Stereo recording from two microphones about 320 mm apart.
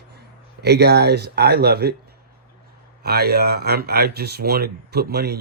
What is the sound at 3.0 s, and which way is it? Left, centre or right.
Speech, right.